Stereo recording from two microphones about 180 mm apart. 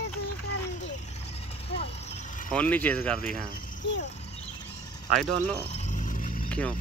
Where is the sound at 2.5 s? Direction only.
10° left (ahead or behind).